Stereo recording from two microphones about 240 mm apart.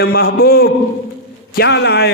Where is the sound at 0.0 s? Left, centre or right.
Left.